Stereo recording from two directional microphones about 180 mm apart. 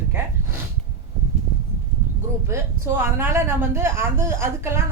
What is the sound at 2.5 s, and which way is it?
Speech, 15° right (ahead or behind).